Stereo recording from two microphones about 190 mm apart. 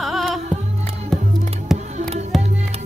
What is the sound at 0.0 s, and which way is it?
Music, centre (ahead or behind).